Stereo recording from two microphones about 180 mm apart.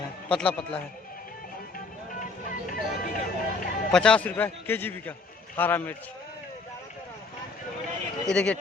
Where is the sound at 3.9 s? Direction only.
5° left (ahead or behind).